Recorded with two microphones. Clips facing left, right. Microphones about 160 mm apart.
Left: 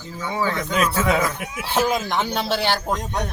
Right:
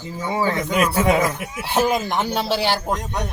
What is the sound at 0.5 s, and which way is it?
Speech, 10° right (ahead or behind).